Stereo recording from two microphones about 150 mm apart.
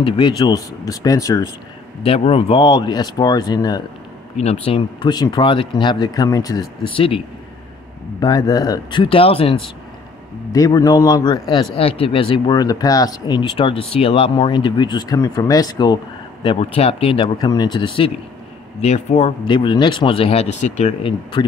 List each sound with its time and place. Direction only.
0.0 s speech: 30° left (ahead or behind)
2.0 s speech: 40° left (ahead or behind)
4.4 s speech: 45° left (ahead or behind); by 6.7 s 25° left (ahead or behind)
8.2 s speech: 25° left (ahead or behind)
10.5 s speech: 25° left (ahead or behind)
16.4 s speech: 40° left (ahead or behind)
18.8 s speech: 50° left (ahead or behind)
19.4 s speech: 30° left (ahead or behind); by 21.1 s 50° left (ahead or behind)